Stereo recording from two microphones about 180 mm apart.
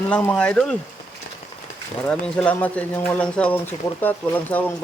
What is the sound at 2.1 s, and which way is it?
Speech, 5° left (ahead or behind).